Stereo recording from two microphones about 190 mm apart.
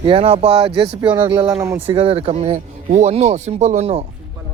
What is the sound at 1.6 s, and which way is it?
Speech, 10° right (ahead or behind).